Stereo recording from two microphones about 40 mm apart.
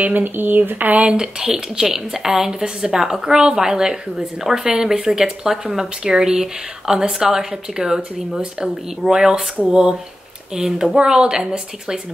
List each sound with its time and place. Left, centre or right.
0.0 s speech: right
1.1 s a woman's voice: centre